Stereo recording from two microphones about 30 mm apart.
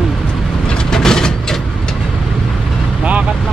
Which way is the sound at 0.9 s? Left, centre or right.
Centre.